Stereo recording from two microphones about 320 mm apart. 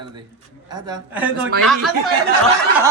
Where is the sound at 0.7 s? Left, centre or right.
Centre.